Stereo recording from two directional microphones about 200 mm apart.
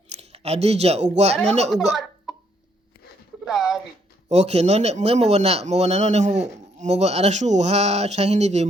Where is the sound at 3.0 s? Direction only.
50° left (ahead or behind).